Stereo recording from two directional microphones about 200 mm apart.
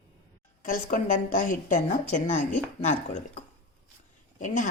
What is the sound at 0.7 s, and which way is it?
A woman's voice, 40° left (ahead or behind).